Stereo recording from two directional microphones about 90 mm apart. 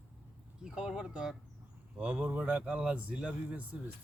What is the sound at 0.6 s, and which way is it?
Speech, 10° right (ahead or behind).